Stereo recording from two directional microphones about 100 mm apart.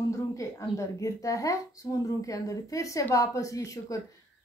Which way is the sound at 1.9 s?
45° left (ahead or behind).